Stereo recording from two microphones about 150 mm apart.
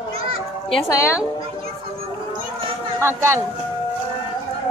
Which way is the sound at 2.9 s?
15° right (ahead or behind).